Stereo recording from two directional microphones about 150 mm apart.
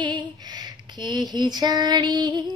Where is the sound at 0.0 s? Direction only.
30° right (ahead or behind).